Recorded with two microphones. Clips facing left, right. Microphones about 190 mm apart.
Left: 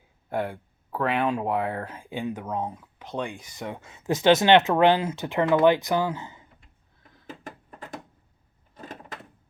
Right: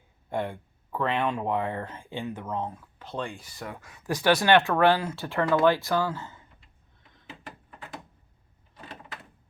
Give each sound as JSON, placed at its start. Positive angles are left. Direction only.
{"t": 0.3, "sound": "speech", "side_deg": 5}
{"t": 7.3, "sound": "a sound", "side_deg": 45}
{"t": 8.7, "sound": "door", "side_deg": 40}